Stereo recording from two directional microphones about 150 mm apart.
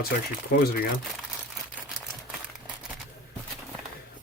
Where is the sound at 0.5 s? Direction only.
90° left.